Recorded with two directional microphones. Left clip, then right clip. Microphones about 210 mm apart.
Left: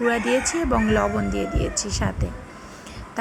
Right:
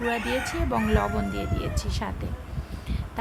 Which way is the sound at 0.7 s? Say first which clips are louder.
Left 4 dB; centre (ahead or behind).